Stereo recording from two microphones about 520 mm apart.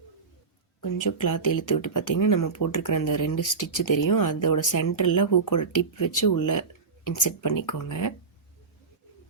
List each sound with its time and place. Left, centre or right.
0.8 s speech: left